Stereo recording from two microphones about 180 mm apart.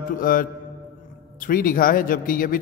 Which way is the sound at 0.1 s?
50° left (ahead or behind).